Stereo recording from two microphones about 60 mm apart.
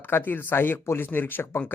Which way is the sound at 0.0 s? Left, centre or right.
Left.